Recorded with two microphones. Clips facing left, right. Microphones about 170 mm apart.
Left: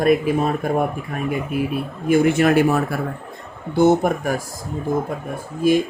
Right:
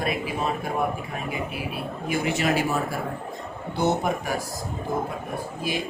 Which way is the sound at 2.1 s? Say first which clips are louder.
Left 9 dB; 50° left (ahead or behind).